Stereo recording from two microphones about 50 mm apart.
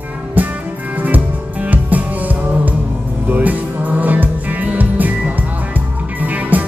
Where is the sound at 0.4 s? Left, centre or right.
Right.